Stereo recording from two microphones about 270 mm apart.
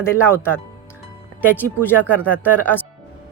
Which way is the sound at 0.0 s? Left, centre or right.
Centre.